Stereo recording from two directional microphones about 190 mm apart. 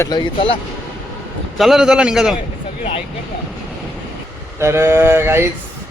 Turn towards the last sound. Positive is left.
turn(degrees=-15)  # may be behind; listen again after turning